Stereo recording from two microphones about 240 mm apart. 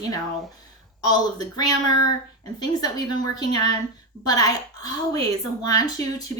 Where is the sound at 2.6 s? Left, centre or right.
Centre.